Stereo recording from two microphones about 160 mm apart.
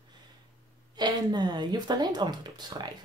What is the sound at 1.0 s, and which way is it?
Speech, 25° right (ahead or behind).